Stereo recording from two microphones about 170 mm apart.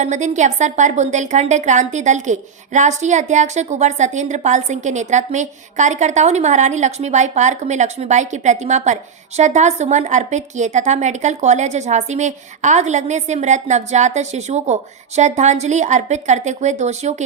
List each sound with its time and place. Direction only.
0.0 s a woman's voice: 45° right (ahead or behind)